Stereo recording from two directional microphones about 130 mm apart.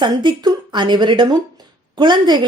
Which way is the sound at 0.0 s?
35° right (ahead or behind).